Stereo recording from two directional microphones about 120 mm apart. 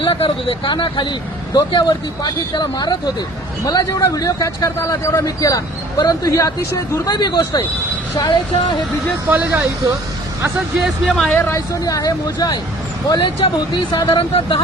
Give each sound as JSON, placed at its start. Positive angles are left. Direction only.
{"t": 0.0, "sound": "speech", "side_deg": 45}
{"t": 9.3, "sound": "speech", "side_deg": -10}
{"t": 10.8, "sound": "speech", "side_deg": 0}
{"t": 11.3, "sound": "speech", "side_deg": 20}
{"t": 13.1, "sound": "speech", "side_deg": 45}